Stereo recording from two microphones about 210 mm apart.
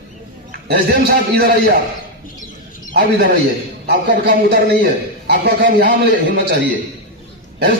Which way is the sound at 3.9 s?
50° right (ahead or behind).